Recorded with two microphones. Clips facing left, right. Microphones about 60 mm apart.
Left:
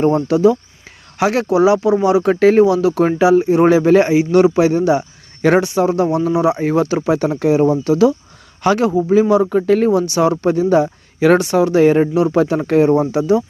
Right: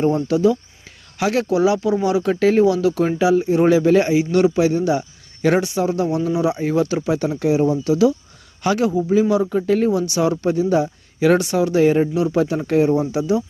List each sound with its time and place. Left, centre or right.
0.0 s speech: left
2.2 s speech: left
2.6 s speech: left
9.4 s speech: left
10.0 s speech: left
11.3 s speech: left